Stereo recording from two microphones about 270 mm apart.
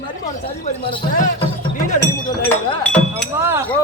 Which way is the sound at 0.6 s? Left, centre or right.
Centre.